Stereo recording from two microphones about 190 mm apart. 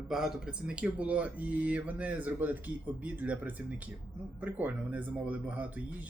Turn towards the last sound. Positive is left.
turn(degrees=-10)  # may be behind; listen again after turning